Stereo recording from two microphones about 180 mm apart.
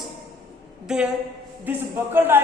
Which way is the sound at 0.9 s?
5° right (ahead or behind).